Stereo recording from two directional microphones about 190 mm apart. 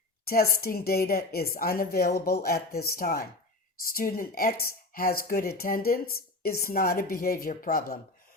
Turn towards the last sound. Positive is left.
turn(degrees=50)  # may be behind; listen again after turning